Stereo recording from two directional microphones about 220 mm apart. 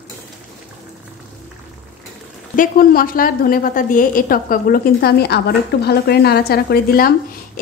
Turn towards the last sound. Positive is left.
turn(degrees=45)  # may be behind; listen again after turning